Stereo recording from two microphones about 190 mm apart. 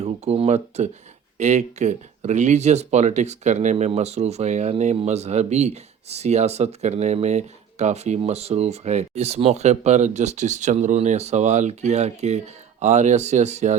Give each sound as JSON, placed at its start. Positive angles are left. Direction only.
{"t": 0.0, "sound": "speech", "side_deg": -35}